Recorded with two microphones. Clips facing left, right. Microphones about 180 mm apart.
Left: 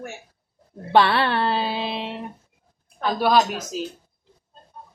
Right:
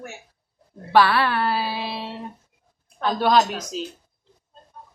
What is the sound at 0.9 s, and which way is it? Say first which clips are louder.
Speech: even; 25° left (ahead or behind).